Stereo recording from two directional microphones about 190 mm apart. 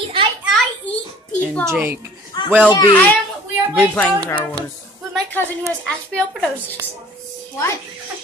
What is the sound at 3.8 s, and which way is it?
Speech, 10° left (ahead or behind).